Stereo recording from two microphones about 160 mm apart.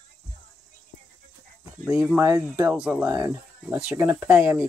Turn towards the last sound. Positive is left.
turn(degrees=-10)  # may be behind; listen again after turning